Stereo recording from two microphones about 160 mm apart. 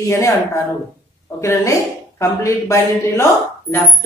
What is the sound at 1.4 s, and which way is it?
A woman's voice, 20° left (ahead or behind).